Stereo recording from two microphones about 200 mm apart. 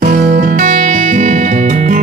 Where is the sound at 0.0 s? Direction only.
40° right (ahead or behind).